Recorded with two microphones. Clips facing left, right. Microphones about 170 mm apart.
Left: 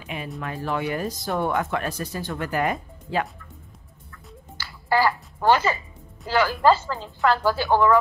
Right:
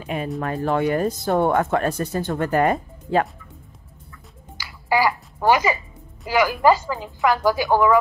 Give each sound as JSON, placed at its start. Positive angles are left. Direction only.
{"t": 0.0, "sound": "speech", "side_deg": -40}
{"t": 4.6, "sound": "music", "side_deg": -10}
{"t": 6.2, "sound": "a woman's voice", "side_deg": -15}